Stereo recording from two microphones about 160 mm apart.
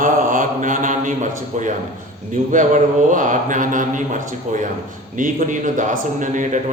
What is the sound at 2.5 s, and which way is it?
Speech, 55° right (ahead or behind).